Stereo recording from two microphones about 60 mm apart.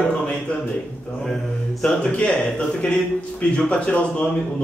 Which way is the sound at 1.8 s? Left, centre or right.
Left.